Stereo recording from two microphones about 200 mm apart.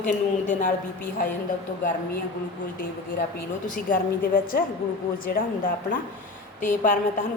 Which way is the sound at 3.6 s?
40° left (ahead or behind).